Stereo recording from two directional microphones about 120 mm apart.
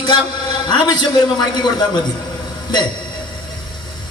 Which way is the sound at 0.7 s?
35° left (ahead or behind).